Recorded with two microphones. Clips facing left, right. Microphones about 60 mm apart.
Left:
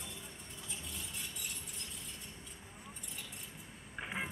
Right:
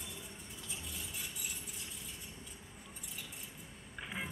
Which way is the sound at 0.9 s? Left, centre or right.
Centre.